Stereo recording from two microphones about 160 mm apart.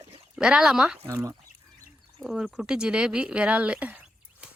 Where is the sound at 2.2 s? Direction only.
Centre (ahead or behind).